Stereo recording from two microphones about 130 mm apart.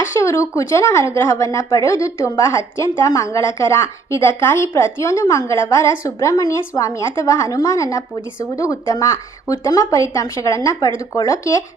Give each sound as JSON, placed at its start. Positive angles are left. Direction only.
{"t": 0.1, "sound": "a woman's voice", "side_deg": 25}